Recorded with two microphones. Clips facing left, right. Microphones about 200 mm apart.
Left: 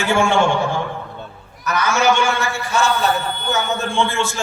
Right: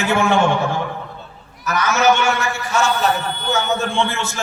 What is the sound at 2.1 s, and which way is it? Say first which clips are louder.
Speech: even; 30° left (ahead or behind).